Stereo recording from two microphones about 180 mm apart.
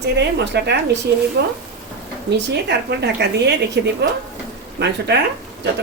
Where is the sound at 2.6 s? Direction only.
70° right (ahead or behind).